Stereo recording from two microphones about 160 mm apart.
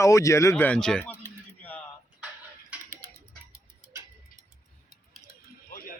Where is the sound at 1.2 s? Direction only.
10° left (ahead or behind).